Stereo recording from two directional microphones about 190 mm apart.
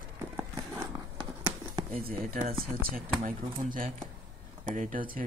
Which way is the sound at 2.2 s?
45° right (ahead or behind).